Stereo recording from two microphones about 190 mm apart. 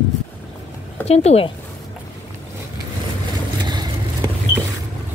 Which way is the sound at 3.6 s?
25° right (ahead or behind).